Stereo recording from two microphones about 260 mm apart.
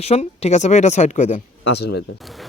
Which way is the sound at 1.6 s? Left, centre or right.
Left.